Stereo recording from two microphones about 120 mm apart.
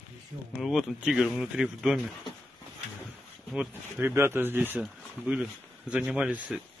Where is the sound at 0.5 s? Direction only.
5° right (ahead or behind).